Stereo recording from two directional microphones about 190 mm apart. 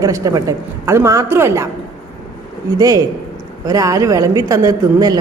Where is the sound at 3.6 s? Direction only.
15° right (ahead or behind).